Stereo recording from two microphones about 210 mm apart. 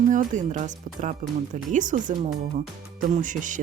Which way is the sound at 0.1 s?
40° right (ahead or behind).